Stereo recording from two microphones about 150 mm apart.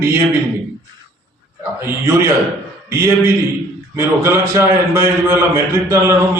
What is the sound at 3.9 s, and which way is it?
A man's voice, 20° right (ahead or behind).